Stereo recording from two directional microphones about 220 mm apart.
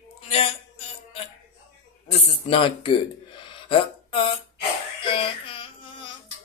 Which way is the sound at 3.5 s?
25° left (ahead or behind).